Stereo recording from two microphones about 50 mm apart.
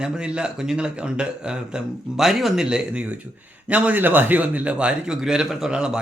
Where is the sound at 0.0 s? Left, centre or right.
Centre.